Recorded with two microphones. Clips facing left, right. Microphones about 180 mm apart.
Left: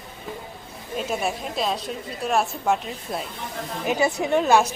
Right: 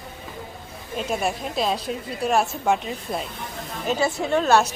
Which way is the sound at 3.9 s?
15° left (ahead or behind).